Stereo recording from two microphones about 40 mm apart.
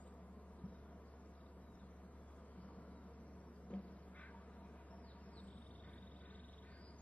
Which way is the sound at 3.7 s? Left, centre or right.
Left.